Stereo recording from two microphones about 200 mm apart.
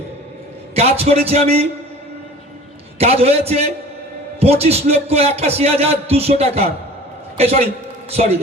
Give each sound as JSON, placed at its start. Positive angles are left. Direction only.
{"t": 0.7, "sound": "a man's voice", "side_deg": -30}
{"t": 3.0, "sound": "a man's voice", "side_deg": -30}